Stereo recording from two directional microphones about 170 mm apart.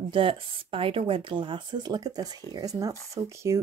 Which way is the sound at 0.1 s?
30° right (ahead or behind).